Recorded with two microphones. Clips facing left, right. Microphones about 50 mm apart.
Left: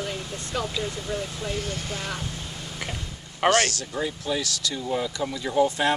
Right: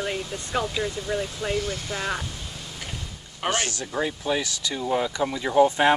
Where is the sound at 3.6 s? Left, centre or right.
Right.